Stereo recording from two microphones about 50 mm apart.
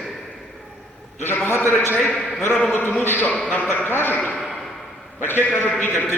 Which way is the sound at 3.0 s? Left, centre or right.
Left.